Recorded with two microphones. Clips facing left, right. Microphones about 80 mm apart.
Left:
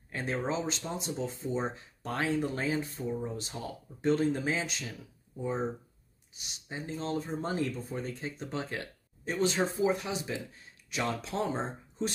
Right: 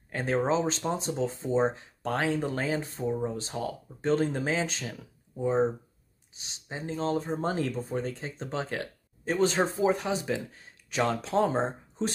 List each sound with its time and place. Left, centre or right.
0.1 s speech: right